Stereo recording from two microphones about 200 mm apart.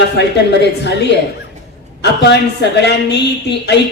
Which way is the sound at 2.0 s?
60° left (ahead or behind).